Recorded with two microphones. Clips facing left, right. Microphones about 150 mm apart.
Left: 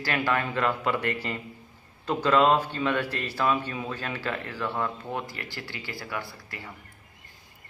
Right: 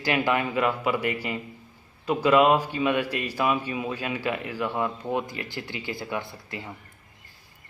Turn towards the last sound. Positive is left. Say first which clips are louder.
# right 4 dB
turn(degrees=-20)  # may be behind; listen again after turning